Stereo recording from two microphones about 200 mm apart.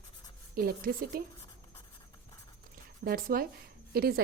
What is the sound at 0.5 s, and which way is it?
Speech, 45° right (ahead or behind).